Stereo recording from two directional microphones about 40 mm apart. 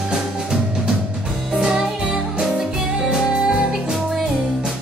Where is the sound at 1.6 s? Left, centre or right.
Centre.